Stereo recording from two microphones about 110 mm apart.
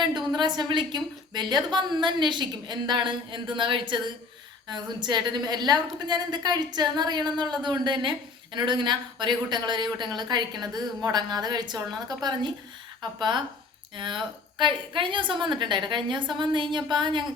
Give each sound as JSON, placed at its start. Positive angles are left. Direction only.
{"t": 0.3, "sound": "a woman's voice", "side_deg": -45}